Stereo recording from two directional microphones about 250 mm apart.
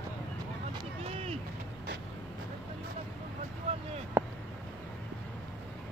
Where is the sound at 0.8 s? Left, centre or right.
Right.